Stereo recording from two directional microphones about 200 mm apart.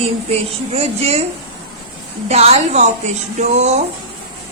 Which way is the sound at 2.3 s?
35° right (ahead or behind).